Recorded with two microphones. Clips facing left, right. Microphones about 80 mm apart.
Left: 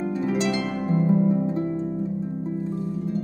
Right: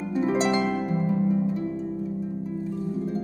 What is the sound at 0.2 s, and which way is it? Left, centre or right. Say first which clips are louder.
Harp: right 3 dB; right.